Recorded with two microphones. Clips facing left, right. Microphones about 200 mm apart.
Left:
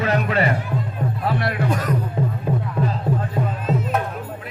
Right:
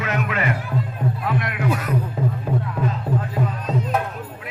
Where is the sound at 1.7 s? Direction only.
10° right (ahead or behind).